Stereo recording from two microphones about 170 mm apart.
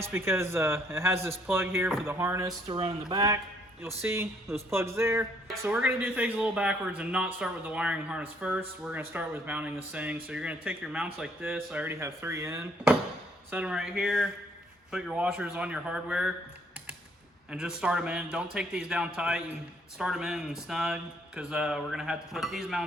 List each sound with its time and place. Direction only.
0.0 s speech: 15° right (ahead or behind)
2.6 s speech: 30° right (ahead or behind); by 16.3 s 5° right (ahead or behind)
17.5 s speech: 5° right (ahead or behind)